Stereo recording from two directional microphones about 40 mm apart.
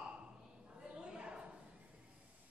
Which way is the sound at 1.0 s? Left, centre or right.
Right.